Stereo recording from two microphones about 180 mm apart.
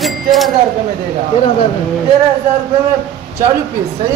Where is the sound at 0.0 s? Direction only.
Centre (ahead or behind).